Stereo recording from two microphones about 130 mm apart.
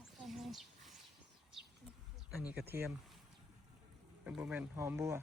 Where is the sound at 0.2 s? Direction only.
Centre (ahead or behind).